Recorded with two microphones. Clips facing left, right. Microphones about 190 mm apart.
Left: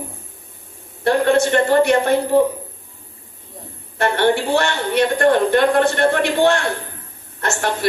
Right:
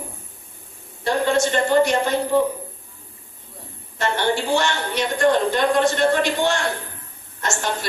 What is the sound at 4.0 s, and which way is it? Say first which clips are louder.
A woman's voice: left 5 dB; 60° left (ahead or behind).